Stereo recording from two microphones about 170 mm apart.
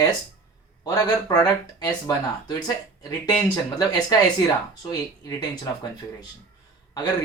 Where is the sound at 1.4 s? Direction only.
25° left (ahead or behind).